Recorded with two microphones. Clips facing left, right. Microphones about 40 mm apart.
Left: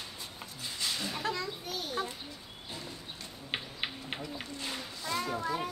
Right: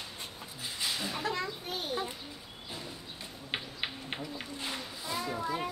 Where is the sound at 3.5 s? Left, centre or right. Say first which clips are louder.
Even; centre.